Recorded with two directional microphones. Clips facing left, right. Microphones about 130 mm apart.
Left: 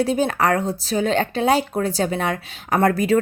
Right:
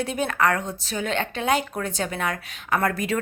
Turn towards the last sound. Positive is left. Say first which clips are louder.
# left 6 dB
turn(degrees=35)  # may be behind; listen again after turning